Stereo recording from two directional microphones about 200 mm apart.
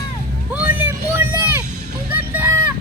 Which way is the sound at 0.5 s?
10° right (ahead or behind).